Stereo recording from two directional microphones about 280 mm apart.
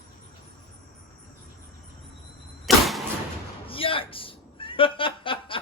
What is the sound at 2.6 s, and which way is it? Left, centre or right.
Vehicle, centre.